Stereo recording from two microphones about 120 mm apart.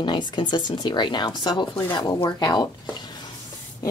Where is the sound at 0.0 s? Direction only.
40° left (ahead or behind).